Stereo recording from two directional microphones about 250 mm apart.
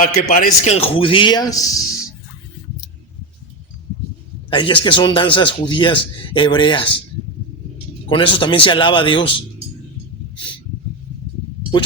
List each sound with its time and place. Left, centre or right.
0.0 s a man's voice: left; by 1.8 s centre
4.4 s a man's voice: centre
8.1 s a man's voice: centre